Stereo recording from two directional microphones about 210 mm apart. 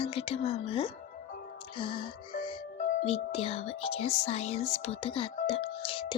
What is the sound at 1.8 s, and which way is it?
Music, 25° left (ahead or behind).